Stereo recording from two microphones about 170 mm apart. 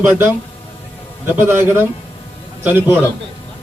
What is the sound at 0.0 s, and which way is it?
Speech, 15° right (ahead or behind).